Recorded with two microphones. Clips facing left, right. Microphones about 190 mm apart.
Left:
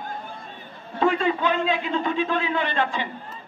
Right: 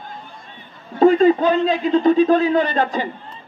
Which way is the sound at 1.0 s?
35° right (ahead or behind).